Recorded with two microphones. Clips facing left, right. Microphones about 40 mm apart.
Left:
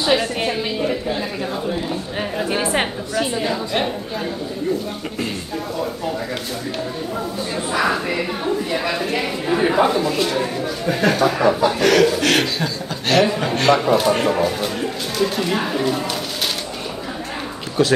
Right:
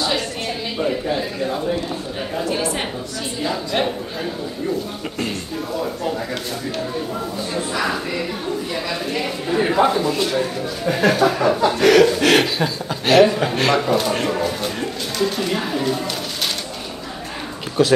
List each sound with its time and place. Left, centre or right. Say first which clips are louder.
0.0 s a sound: left 4 dB; centre
0.7 s a man's voice: right 1 dB; centre
2.3 s a woman's voice: left 2 dB; left
3.4 s a woman's voice: even; centre
7.5 s a sound: left 3 dB; centre
9.6 s speech: right 1 dB; centre
10.9 s chuckle: right 1 dB; centre
17.8 s a woman's voice: right 1 dB; centre